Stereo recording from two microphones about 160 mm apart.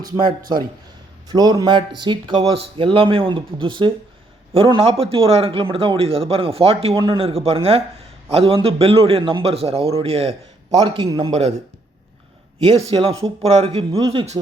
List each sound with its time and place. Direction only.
0.3 s a man's voice: 25° right (ahead or behind)
12.7 s a man's voice: 40° right (ahead or behind)